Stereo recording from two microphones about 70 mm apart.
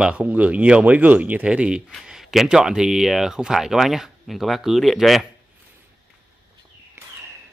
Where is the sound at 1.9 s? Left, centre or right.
Centre.